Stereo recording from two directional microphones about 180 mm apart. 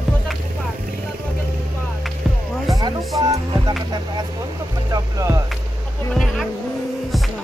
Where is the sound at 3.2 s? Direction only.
20° right (ahead or behind).